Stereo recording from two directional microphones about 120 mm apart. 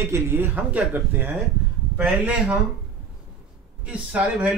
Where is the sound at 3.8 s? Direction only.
10° right (ahead or behind).